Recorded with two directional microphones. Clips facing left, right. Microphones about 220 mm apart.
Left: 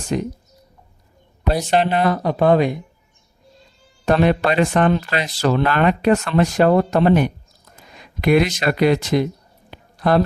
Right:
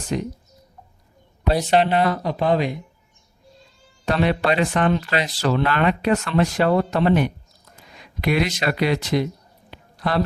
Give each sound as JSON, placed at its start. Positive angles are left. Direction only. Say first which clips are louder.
{"t": 0.1, "sound": "speech", "louder": "left 3 dB", "side_deg": 50}
{"t": 1.8, "sound": "speech", "louder": "left 1 dB", "side_deg": 50}
{"t": 4.0, "sound": "speech", "louder": "left 4 dB", "side_deg": 50}
{"t": 9.6, "sound": "a sound", "louder": "left 7 dB", "side_deg": 50}